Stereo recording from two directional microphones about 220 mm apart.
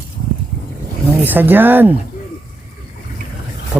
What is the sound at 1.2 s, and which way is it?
Speech, 10° right (ahead or behind).